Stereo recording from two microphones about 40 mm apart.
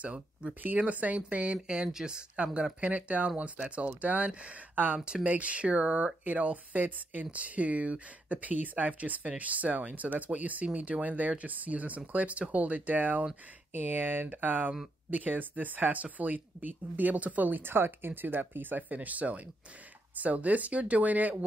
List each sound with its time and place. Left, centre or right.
0.0 s speech: right
0.6 s speech: right
1.9 s speech: centre
2.3 s speech: right
4.7 s speech: right
14.2 s speech: right
17.6 s speech: right